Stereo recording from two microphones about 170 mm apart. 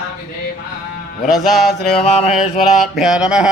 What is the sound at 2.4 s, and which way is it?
A man's voice, 5° right (ahead or behind).